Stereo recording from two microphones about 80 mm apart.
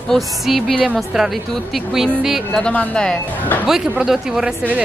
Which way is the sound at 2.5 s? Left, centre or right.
Centre.